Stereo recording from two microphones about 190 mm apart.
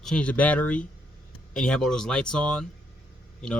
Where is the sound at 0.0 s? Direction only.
5° left (ahead or behind).